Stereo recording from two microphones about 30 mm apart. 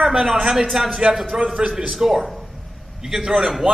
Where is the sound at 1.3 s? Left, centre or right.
Centre.